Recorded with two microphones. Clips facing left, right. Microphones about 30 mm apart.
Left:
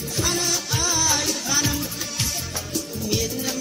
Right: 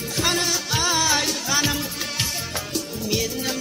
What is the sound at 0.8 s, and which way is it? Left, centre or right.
Music, right.